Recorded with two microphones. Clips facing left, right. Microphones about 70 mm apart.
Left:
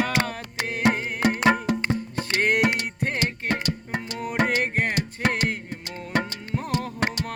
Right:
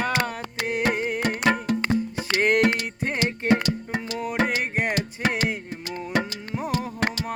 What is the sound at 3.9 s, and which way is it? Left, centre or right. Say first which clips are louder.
Music: left 1 dB; centre.